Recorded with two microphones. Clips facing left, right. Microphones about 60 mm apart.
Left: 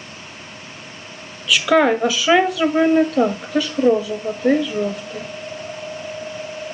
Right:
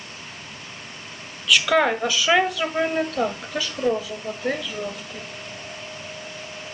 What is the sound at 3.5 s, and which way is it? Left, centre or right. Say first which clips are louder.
Speech: left 9 dB; left.